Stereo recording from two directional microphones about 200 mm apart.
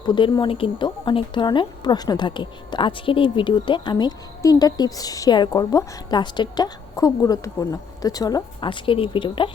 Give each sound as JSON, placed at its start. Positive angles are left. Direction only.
{"t": 0.0, "sound": "speech", "side_deg": 20}